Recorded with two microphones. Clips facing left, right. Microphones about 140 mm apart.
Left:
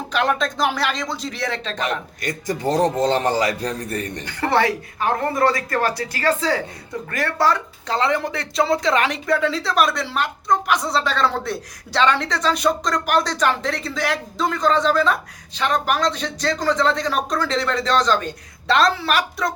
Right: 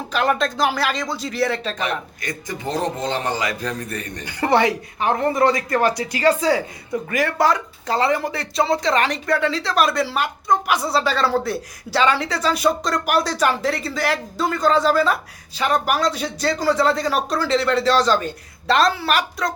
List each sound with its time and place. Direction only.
0.1 s speech: centre (ahead or behind)
2.2 s a man's voice: 40° left (ahead or behind)
4.3 s speech: 15° right (ahead or behind)